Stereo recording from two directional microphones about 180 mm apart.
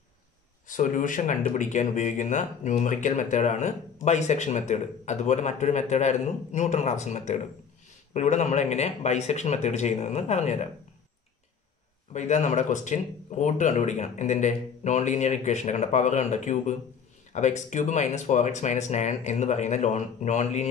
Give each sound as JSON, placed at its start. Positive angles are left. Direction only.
{"t": 0.7, "sound": "speech", "side_deg": 45}
{"t": 12.1, "sound": "speech", "side_deg": 40}